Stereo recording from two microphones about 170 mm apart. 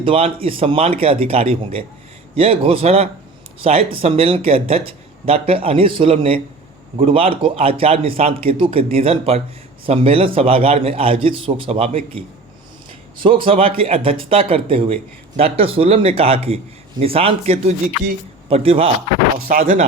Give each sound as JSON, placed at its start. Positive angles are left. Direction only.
{"t": 0.0, "sound": "speech", "side_deg": -35}
{"t": 19.5, "sound": "speech", "side_deg": -50}